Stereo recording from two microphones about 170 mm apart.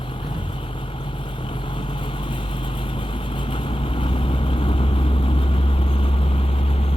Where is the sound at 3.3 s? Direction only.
30° left (ahead or behind).